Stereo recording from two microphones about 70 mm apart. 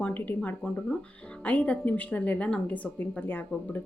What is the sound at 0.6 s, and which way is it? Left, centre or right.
Speech, centre.